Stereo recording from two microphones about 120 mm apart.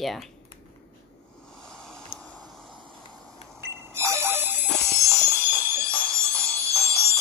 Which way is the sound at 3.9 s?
20° right (ahead or behind).